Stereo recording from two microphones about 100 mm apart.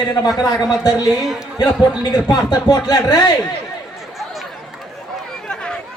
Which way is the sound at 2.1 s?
40° left (ahead or behind).